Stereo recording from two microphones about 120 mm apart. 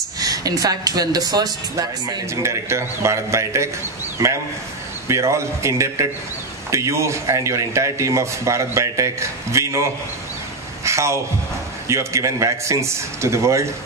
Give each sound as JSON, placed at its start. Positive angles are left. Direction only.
{"t": 0.2, "sound": "speech", "side_deg": -30}
{"t": 5.0, "sound": "speech", "side_deg": -25}
{"t": 10.8, "sound": "a sound", "side_deg": -25}
{"t": 11.9, "sound": "speech", "side_deg": -25}